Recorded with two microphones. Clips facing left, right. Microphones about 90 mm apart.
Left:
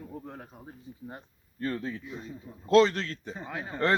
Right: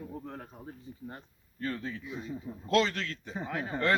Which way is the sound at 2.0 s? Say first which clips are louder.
Right 2 dB; 5° right (ahead or behind).